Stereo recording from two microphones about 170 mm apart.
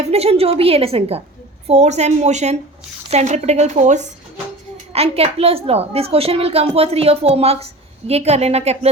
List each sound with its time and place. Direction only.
0.1 s a child's voice: 35° right (ahead or behind)